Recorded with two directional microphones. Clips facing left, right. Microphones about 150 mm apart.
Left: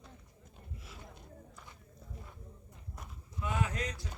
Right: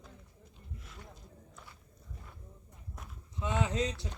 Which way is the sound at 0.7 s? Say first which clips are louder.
Even; 5° left (ahead or behind).